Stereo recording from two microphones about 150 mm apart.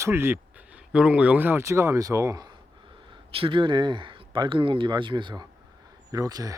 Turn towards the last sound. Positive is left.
turn(degrees=-25)  # may be behind; listen again after turning